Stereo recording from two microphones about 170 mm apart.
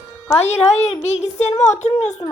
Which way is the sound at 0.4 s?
40° left (ahead or behind).